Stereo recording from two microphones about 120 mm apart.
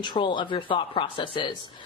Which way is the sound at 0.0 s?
40° left (ahead or behind).